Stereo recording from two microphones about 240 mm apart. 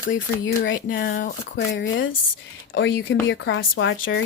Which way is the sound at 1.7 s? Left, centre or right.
Left.